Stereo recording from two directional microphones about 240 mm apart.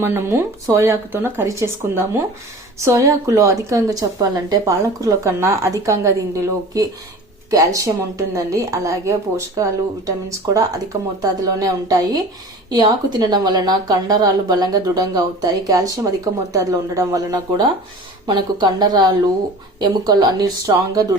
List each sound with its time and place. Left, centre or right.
0.0 s a woman's voice: centre